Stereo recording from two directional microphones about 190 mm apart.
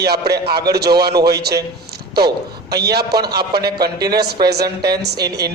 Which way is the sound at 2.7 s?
60° right (ahead or behind).